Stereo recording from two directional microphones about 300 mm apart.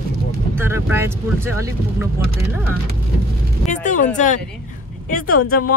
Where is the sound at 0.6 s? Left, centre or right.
Centre.